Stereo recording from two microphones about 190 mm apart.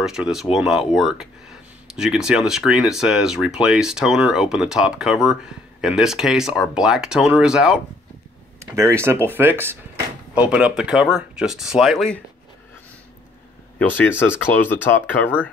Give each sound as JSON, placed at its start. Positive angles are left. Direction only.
{"t": 0.0, "sound": "speech", "side_deg": -5}
{"t": 8.5, "sound": "speech", "side_deg": -15}
{"t": 13.7, "sound": "speech", "side_deg": 10}